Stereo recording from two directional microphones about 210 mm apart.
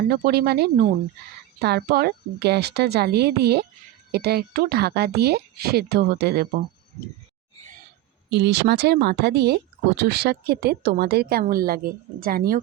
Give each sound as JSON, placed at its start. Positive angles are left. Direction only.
{"t": 0.1, "sound": "a woman's voice", "side_deg": -45}
{"t": 8.3, "sound": "a woman's voice", "side_deg": -55}